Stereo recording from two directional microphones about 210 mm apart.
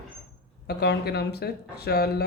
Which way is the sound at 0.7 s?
50° left (ahead or behind).